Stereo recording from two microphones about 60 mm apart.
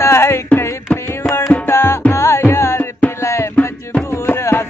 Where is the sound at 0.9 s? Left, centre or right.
Left.